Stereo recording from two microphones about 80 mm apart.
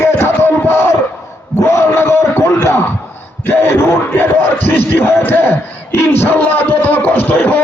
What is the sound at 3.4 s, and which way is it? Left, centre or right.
Speech, left.